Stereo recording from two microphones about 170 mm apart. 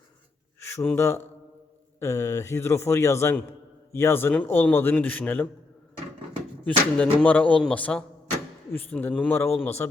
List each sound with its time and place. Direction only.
0.6 s a man's voice: 10° left (ahead or behind)
6.7 s a man's voice: 10° left (ahead or behind)